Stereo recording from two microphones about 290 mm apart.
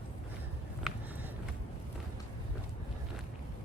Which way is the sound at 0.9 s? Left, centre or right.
Centre.